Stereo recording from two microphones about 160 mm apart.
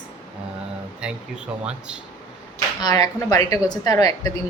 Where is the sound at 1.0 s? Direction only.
5° right (ahead or behind).